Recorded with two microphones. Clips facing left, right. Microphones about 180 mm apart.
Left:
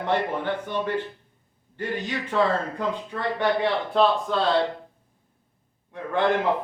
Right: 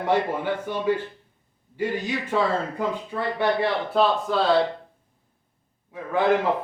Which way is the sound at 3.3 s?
5° right (ahead or behind).